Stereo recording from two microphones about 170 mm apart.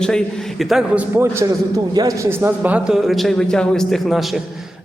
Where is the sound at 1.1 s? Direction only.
15° right (ahead or behind).